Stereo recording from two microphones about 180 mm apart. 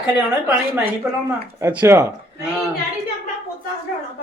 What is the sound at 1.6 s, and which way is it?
Speech, 15° right (ahead or behind).